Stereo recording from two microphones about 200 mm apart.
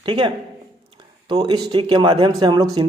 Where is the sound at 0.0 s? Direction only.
25° right (ahead or behind).